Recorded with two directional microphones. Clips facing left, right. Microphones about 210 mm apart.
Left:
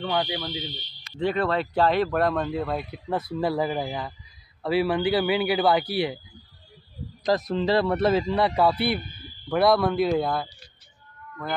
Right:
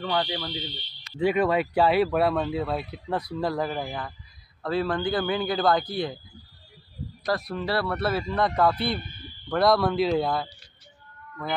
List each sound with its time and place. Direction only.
0.0 s speech: 5° left (ahead or behind)
1.1 s speech: 10° right (ahead or behind); by 6.1 s 10° left (ahead or behind)
7.2 s speech: 20° left (ahead or behind); by 10.5 s centre (ahead or behind)